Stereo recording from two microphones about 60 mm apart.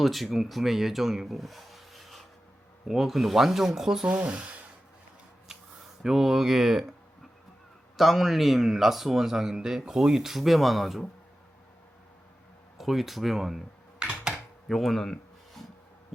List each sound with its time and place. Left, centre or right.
0.0 s speech: centre
4.0 s speech: right
6.0 s speech: centre
7.9 s speech: centre
12.7 s speech: centre
14.0 s typewriter: centre
14.7 s speech: centre